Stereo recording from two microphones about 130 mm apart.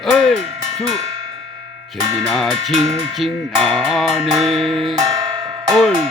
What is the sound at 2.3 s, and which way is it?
Music, centre (ahead or behind).